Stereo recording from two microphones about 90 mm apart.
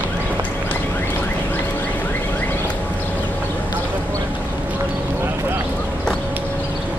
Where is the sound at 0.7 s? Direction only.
20° left (ahead or behind).